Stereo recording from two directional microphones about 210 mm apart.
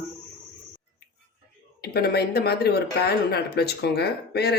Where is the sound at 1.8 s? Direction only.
50° left (ahead or behind).